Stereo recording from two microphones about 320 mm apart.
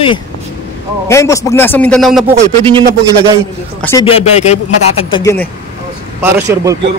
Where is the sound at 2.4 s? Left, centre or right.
Centre.